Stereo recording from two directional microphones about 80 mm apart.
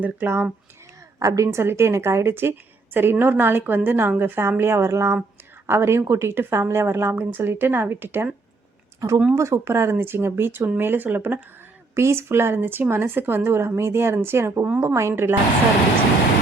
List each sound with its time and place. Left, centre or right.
0.0 s a woman's voice: right
1.2 s a woman's voice: right
9.0 s a woman's voice: right